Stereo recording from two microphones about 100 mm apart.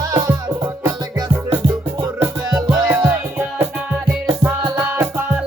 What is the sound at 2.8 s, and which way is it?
Music, 20° right (ahead or behind).